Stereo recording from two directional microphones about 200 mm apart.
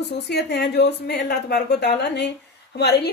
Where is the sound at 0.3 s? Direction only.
55° left (ahead or behind).